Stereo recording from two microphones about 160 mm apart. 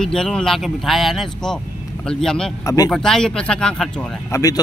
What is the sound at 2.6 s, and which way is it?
Speech, 20° left (ahead or behind).